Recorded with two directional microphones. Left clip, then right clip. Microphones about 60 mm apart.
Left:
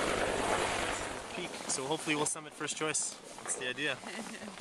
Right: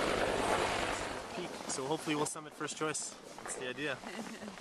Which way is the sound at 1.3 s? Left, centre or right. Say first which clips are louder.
Left 2 dB; left.